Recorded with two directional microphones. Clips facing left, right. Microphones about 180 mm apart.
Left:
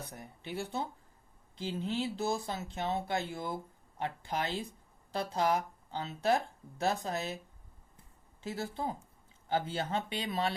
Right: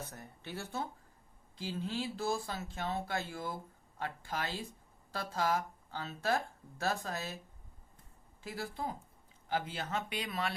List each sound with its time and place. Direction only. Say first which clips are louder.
0.0 s speech: left 1 dB; 15° left (ahead or behind)
8.4 s speech: left 3 dB; 25° left (ahead or behind)